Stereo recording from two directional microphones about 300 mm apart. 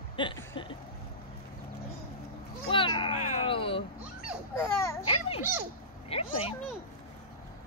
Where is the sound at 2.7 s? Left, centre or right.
Centre.